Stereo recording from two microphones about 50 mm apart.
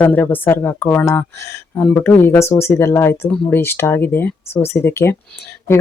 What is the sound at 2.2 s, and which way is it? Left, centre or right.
Speech, left.